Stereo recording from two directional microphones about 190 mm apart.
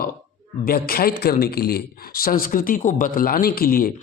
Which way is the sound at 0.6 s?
50° left (ahead or behind).